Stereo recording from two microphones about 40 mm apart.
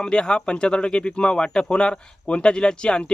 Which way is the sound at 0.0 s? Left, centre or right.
Left.